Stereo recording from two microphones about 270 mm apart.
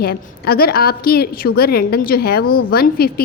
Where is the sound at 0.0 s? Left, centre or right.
Left.